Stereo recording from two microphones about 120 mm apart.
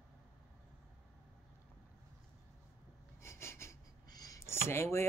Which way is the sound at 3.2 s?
20° left (ahead or behind).